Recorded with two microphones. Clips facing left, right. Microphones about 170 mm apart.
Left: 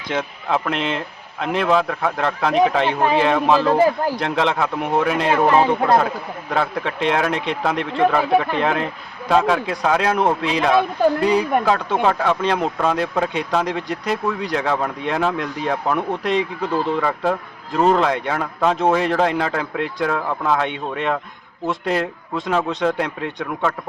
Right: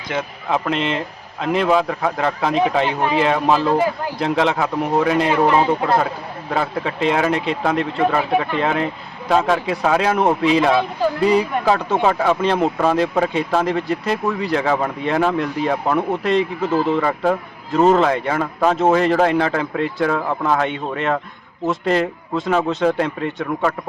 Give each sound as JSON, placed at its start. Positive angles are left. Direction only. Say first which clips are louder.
{"t": 0.1, "sound": "speech", "louder": "even", "side_deg": -5}
{"t": 6.5, "sound": "speech", "louder": "even", "side_deg": -5}